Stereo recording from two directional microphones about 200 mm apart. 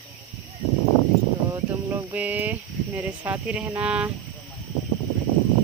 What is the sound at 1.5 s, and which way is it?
Speech, 15° right (ahead or behind).